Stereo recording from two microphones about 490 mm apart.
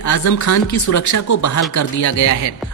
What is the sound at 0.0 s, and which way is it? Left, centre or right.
Speech, left.